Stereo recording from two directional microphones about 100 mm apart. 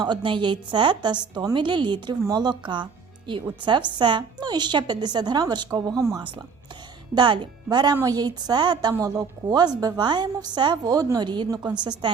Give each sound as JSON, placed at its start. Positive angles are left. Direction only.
{"t": 0.0, "sound": "a woman's voice", "side_deg": -50}
{"t": 7.1, "sound": "a woman's voice", "side_deg": -45}